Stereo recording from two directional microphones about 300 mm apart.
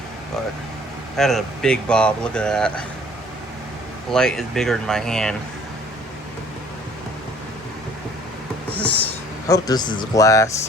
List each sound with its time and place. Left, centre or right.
1.1 s speech: centre
4.1 s speech: centre
8.7 s a sound: right
9.5 s speech: centre